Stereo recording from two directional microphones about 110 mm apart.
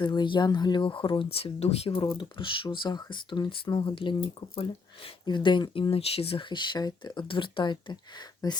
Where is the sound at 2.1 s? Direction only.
50° left (ahead or behind).